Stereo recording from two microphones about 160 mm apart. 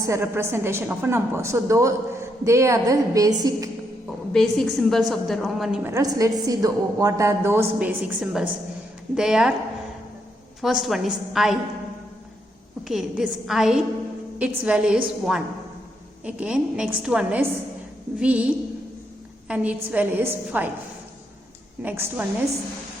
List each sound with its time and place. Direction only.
0.0 s a woman's voice: 15° right (ahead or behind)
4.3 s a woman's voice: 5° left (ahead or behind)
5.8 s a woman's voice: 20° right (ahead or behind); by 9.5 s 5° right (ahead or behind)
10.6 s a woman's voice: centre (ahead or behind)
12.9 s a woman's voice: centre (ahead or behind)
21.8 s a woman's voice: 15° right (ahead or behind)